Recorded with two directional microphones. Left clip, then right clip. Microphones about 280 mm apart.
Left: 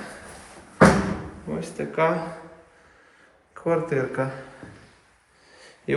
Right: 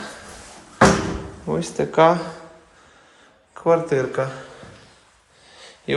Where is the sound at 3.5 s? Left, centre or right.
Centre.